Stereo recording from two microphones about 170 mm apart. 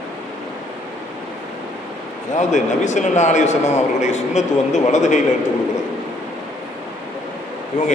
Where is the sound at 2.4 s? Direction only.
45° left (ahead or behind).